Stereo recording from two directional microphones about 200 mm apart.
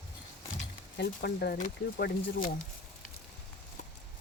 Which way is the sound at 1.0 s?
55° left (ahead or behind).